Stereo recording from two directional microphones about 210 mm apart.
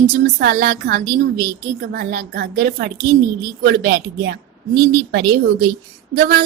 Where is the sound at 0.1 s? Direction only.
50° right (ahead or behind).